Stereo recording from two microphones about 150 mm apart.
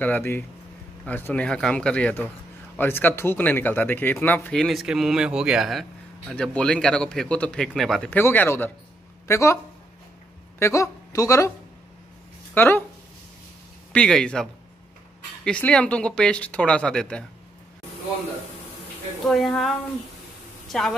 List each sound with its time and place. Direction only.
0.0 s speech: 15° left (ahead or behind)
8.1 s speech: 15° left (ahead or behind)
10.6 s speech: 20° left (ahead or behind)
12.5 s speech: 15° left (ahead or behind)
13.9 s speech: 5° left (ahead or behind)
19.2 s speech: centre (ahead or behind)
20.6 s a sound: centre (ahead or behind)